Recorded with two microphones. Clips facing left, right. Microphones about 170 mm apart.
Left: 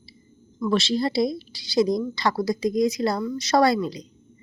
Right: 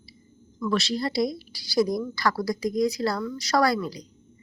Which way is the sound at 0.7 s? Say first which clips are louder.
Left 4 dB; 25° left (ahead or behind).